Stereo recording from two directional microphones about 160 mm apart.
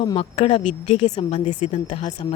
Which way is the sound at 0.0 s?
30° left (ahead or behind).